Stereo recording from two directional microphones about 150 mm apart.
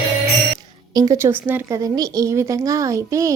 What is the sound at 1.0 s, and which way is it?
Speech, 20° right (ahead or behind).